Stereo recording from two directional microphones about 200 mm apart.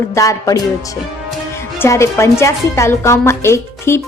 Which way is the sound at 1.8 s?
15° left (ahead or behind).